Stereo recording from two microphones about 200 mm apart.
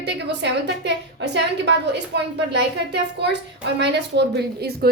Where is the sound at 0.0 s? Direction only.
55° right (ahead or behind).